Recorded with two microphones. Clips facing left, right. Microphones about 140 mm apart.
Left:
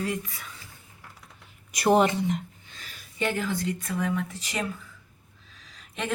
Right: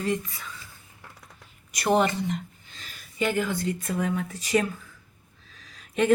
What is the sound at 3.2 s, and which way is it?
Speech, 5° right (ahead or behind).